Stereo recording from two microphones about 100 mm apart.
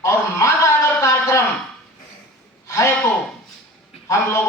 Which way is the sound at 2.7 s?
30° left (ahead or behind).